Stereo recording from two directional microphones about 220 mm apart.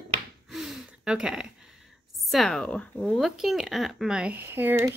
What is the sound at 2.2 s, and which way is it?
Speech, centre (ahead or behind).